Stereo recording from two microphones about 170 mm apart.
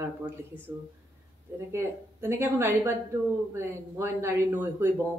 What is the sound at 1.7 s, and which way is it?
Speech, 15° right (ahead or behind).